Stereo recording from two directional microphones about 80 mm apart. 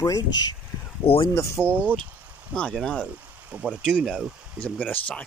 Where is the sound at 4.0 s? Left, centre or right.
Centre.